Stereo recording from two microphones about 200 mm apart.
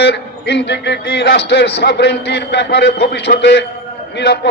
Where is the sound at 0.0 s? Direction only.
60° left (ahead or behind).